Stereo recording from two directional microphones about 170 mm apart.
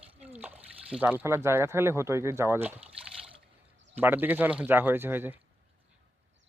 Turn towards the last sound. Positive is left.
turn(degrees=-10)  # may be behind; listen again after turning